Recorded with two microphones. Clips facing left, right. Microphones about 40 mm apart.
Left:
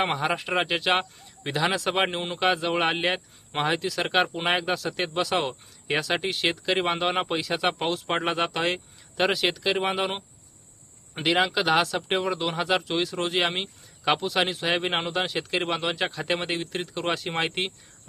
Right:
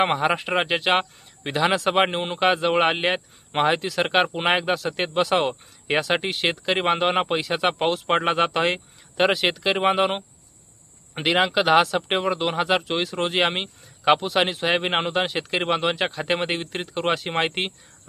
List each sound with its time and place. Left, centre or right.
0.0 s speech: centre